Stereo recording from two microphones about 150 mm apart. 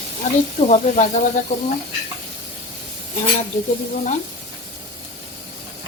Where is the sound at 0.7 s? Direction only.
50° left (ahead or behind).